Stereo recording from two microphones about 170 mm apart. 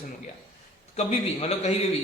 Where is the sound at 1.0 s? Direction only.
40° left (ahead or behind).